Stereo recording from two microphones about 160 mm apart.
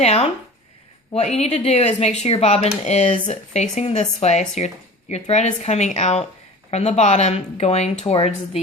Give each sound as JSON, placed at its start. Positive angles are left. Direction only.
{"t": 0.0, "sound": "speech", "side_deg": 40}